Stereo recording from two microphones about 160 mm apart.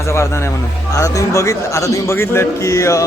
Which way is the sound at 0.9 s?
20° left (ahead or behind).